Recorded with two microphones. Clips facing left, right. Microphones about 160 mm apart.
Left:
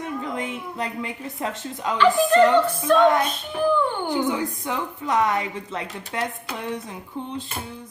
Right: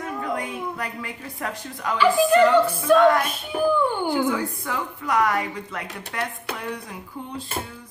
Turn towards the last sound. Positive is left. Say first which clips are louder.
# left 1 dB
turn(degrees=20)  # may be behind; listen again after turning